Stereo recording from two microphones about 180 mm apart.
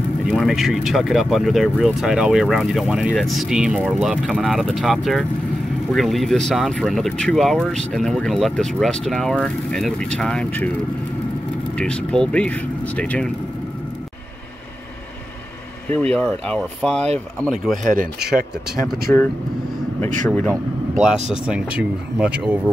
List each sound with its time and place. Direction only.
0.3 s speech: centre (ahead or behind)
11.7 s speech: 5° left (ahead or behind)
15.9 s speech: 5° left (ahead or behind)
17.8 s speech: 50° right (ahead or behind)
19.1 s speech: 10° left (ahead or behind)
20.2 s speech: 5° left (ahead or behind)
21.0 s speech: 5° right (ahead or behind)